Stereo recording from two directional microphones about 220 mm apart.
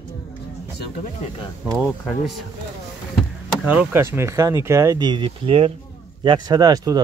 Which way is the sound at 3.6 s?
5° right (ahead or behind).